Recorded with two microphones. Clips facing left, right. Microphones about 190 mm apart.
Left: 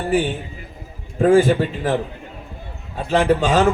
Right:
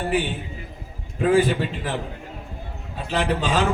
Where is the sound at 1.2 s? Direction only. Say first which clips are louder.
Left 5 dB; 45° left (ahead or behind).